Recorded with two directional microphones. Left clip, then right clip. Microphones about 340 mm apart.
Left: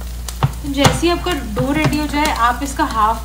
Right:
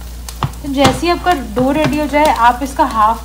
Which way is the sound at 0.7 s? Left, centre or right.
Centre.